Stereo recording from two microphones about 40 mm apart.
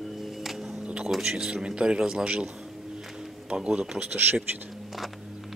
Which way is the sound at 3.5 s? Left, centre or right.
Centre.